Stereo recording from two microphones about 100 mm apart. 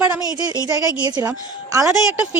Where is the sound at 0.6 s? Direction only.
35° right (ahead or behind).